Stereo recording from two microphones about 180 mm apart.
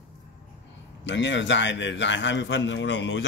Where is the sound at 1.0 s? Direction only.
85° left.